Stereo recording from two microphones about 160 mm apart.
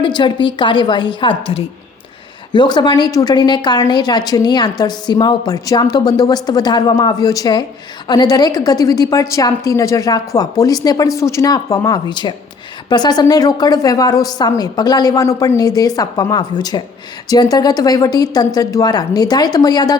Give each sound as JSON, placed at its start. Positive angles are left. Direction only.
{"t": 0.0, "sound": "a woman's voice", "side_deg": 30}